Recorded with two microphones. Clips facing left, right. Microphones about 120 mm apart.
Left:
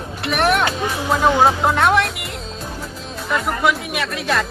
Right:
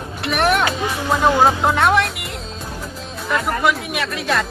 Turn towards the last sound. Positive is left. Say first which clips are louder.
# even
turn(degrees=0)  # may be behind; listen again after turning